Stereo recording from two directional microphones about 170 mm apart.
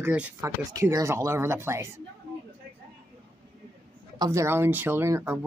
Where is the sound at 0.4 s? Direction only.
20° right (ahead or behind).